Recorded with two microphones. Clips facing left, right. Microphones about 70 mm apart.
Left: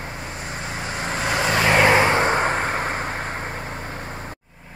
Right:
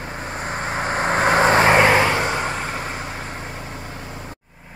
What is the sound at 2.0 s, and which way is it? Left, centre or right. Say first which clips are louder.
Vehicle: left 2 dB; left.